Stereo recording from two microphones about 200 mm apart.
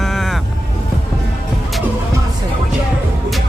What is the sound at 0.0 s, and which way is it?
Music, centre (ahead or behind).